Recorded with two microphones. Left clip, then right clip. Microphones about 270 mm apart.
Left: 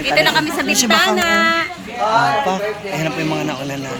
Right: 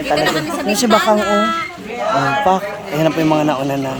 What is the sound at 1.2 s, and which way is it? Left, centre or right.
Speech, centre.